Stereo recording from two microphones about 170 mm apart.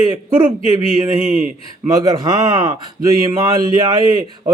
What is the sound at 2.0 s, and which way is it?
Speech, 25° right (ahead or behind).